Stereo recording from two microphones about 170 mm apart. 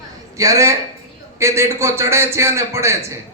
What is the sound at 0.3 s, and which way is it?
A man's voice, 20° right (ahead or behind).